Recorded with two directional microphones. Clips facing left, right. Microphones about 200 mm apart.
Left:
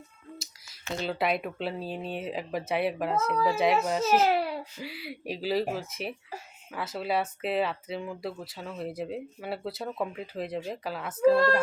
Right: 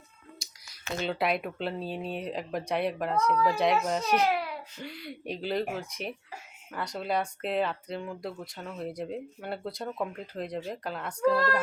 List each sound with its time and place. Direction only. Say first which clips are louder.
1.0 s speech: even; centre (ahead or behind)
4.3 s a sound: left 3 dB; 30° left (ahead or behind)
4.8 s speech: left 1 dB; 5° left (ahead or behind)